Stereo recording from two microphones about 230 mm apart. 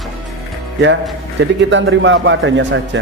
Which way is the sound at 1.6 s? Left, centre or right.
Right.